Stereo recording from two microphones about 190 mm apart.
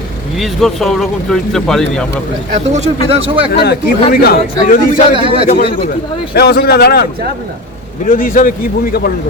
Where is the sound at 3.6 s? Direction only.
55° left (ahead or behind).